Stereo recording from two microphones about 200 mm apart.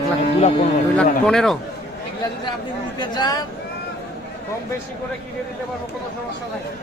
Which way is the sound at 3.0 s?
20° left (ahead or behind).